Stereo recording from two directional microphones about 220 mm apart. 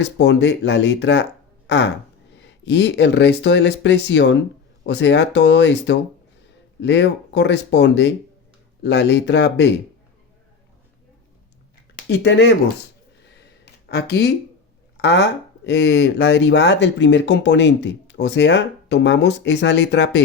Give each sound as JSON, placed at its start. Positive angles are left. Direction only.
{"t": 0.0, "sound": "speech", "side_deg": 50}
{"t": 11.9, "sound": "speech", "side_deg": 50}
{"t": 13.7, "sound": "speech", "side_deg": 50}